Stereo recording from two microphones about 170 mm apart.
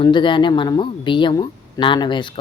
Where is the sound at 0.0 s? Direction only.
25° left (ahead or behind).